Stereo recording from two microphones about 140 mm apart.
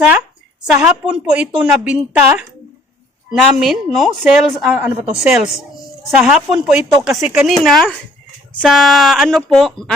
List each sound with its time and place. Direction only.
0.8 s a woman's voice: 5° right (ahead or behind)
3.3 s a woman's voice: centre (ahead or behind)